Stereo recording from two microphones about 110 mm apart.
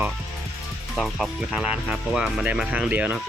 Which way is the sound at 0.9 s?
Centre (ahead or behind).